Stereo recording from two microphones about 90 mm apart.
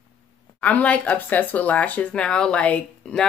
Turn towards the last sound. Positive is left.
turn(degrees=10)  # may be behind; listen again after turning